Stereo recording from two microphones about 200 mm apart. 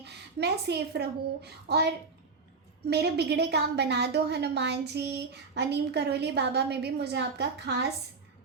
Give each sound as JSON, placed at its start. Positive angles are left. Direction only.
{"t": 0.0, "sound": "a woman's voice", "side_deg": -55}
{"t": 2.9, "sound": "a woman's voice", "side_deg": -55}